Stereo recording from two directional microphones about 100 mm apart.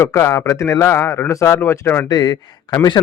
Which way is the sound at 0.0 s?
30° left (ahead or behind).